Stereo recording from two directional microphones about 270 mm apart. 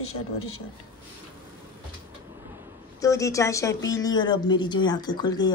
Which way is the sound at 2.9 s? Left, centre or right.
Centre.